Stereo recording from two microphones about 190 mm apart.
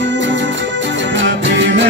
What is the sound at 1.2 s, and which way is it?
Music, 70° right (ahead or behind).